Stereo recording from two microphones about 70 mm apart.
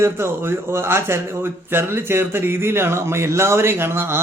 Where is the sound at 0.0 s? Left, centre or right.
Right.